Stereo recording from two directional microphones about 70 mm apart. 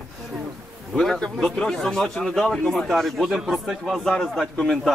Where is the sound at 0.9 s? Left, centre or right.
Centre.